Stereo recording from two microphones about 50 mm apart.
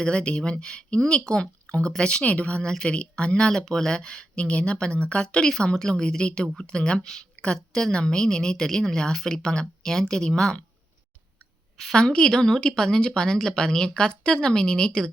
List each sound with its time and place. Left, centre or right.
0.0 s a woman's voice: centre
11.9 s a woman's voice: centre